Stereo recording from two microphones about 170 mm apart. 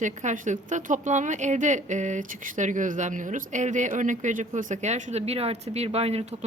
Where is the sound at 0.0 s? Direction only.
45° right (ahead or behind).